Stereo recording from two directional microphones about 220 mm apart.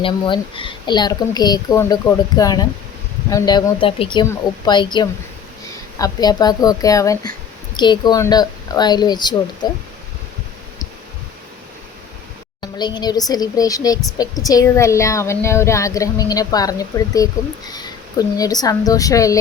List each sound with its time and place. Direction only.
0.0 s a woman's voice: 25° left (ahead or behind)
12.6 s speech: 20° left (ahead or behind)